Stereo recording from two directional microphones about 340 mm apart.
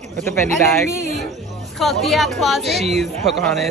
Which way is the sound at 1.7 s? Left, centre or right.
Centre.